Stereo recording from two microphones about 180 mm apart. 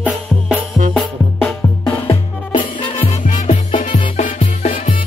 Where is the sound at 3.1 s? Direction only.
40° left (ahead or behind).